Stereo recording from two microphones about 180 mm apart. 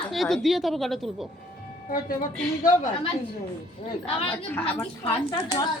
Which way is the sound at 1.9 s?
50° left (ahead or behind).